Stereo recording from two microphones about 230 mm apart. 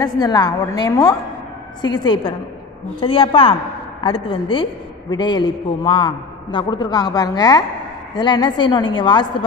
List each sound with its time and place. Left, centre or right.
0.0 s a woman's voice: centre